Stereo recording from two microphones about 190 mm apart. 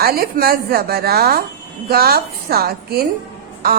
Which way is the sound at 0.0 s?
50° right (ahead or behind).